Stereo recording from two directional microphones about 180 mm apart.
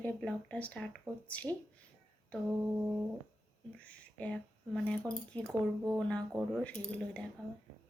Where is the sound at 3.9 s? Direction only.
5° left (ahead or behind).